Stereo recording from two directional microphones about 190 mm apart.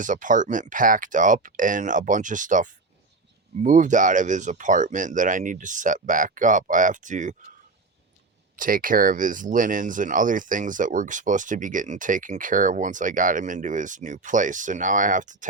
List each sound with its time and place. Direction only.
0.0 s speech: 45° right (ahead or behind)
8.5 s speech: 45° right (ahead or behind)